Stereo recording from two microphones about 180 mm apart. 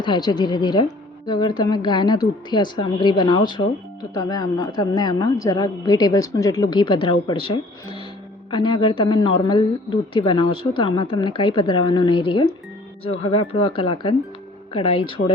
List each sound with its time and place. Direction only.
0.0 s a woman's voice: 25° left (ahead or behind)